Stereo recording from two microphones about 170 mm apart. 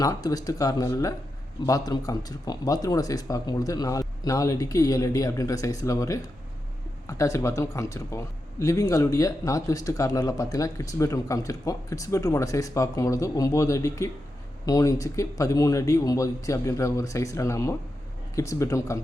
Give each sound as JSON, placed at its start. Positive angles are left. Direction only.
{"t": 0.0, "sound": "a man's voice", "side_deg": 20}